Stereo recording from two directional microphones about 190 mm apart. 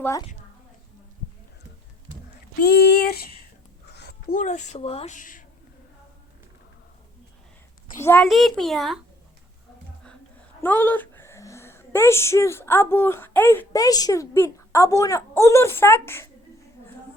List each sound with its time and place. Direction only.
0.0 s a child's voice: 15° left (ahead or behind)
2.6 s speech: 55° left (ahead or behind)
3.9 s a sound: 60° left (ahead or behind)
4.4 s speech: 40° left (ahead or behind)
7.9 s a child's voice: 15° left (ahead or behind)
8.2 s a child's voice: centre (ahead or behind)
10.6 s speech: 10° left (ahead or behind)